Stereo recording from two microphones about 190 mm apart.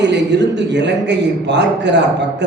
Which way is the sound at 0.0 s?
65° right (ahead or behind).